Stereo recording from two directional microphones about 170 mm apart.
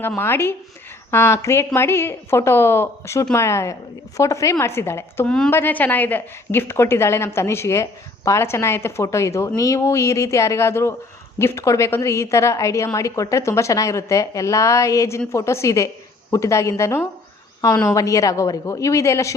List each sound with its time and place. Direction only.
0.2 s a woman's voice: 15° left (ahead or behind)